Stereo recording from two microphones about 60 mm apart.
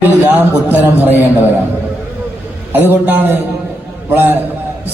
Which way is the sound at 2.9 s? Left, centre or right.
Right.